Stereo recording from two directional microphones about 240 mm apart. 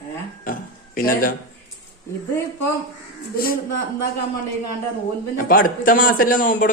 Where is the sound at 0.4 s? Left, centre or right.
Left.